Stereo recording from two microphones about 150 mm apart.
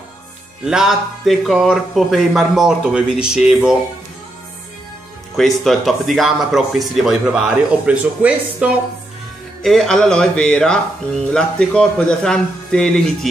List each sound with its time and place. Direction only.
0.7 s speech: 5° right (ahead or behind)
5.3 s speech: centre (ahead or behind)
9.6 s speech: centre (ahead or behind)